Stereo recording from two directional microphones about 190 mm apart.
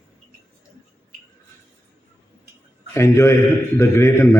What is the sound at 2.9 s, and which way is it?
A man's voice, 15° left (ahead or behind).